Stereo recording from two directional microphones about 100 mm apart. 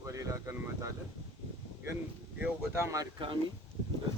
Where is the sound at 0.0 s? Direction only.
35° right (ahead or behind).